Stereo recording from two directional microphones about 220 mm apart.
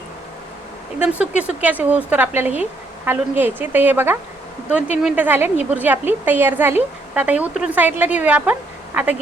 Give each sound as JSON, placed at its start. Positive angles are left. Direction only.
{"t": 0.9, "sound": "a woman's voice", "side_deg": -5}